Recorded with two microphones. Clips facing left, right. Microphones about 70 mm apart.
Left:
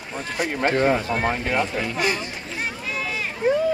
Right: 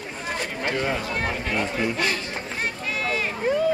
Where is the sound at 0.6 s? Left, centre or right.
Left.